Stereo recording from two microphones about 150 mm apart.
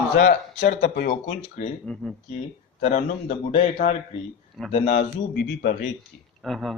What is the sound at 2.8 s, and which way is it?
A man's voice, 45° left (ahead or behind).